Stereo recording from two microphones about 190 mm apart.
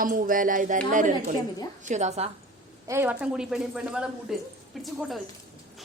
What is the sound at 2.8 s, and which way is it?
A woman's voice, 10° right (ahead or behind).